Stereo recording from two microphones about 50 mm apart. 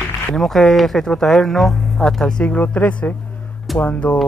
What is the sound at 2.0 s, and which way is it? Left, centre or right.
Speech, centre.